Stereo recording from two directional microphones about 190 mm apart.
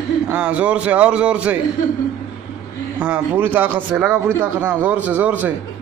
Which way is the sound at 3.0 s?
10° right (ahead or behind).